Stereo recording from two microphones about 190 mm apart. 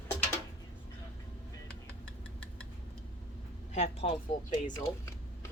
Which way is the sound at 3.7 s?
35° left (ahead or behind).